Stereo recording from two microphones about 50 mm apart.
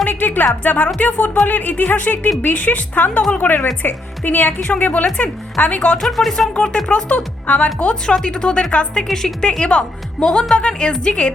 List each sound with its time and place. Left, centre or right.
0.1 s speech: left
6.0 s speech: centre
6.9 s speech: left
8.0 s a woman's voice: centre
9.5 s a woman's voice: left